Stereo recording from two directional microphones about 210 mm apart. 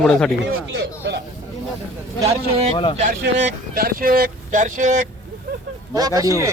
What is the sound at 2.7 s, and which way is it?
Speech, 25° left (ahead or behind).